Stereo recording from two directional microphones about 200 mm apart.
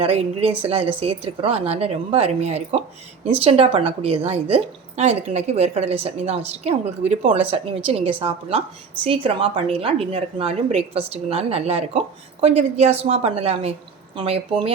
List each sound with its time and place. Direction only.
0.0 s a woman's voice: 30° right (ahead or behind)